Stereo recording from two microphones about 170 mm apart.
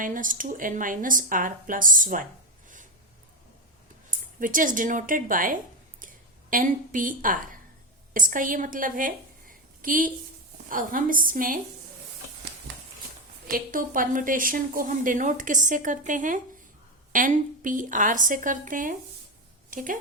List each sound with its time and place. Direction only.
0.0 s a woman's voice: 50° right (ahead or behind)
4.4 s a woman's voice: 50° right (ahead or behind)
13.5 s a woman's voice: 55° right (ahead or behind)